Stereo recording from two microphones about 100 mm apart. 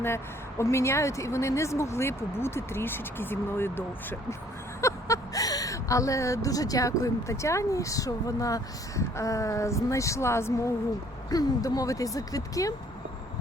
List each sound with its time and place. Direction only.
0.6 s speech: 30° left (ahead or behind)
11.3 s speech: 40° left (ahead or behind)